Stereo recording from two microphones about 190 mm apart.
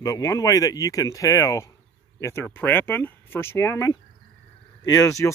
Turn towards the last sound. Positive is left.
turn(degrees=15)  # may be behind; listen again after turning